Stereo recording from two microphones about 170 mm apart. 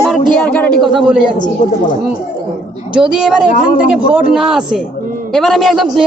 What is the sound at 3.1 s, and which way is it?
Speech, 5° right (ahead or behind).